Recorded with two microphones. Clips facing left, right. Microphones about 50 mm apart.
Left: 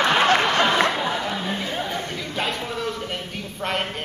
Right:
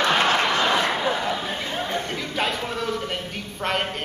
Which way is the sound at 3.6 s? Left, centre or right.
Centre.